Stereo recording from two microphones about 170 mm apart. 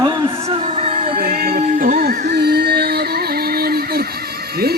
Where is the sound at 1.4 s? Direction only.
55° right (ahead or behind).